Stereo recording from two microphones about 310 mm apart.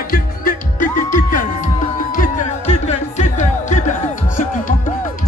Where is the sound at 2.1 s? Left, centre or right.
Left.